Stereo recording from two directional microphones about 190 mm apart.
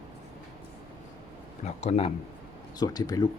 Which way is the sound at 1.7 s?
35° left (ahead or behind).